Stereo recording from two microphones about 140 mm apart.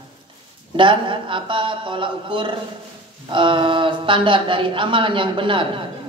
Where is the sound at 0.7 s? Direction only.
35° right (ahead or behind).